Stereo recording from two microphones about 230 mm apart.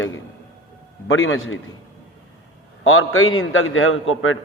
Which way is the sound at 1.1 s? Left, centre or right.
Left.